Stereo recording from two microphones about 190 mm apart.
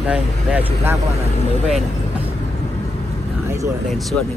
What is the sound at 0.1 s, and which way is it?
Speech, 10° right (ahead or behind).